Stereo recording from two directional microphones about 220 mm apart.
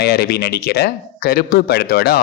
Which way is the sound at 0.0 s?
45° left (ahead or behind).